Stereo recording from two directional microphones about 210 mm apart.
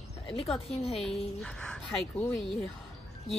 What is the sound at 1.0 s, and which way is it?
Speech, 5° left (ahead or behind).